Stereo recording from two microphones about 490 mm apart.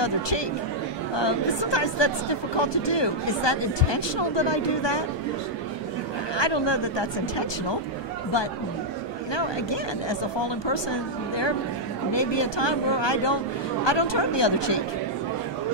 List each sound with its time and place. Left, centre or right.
1.1 s speech: left
6.3 s speech: left
9.3 s speech: left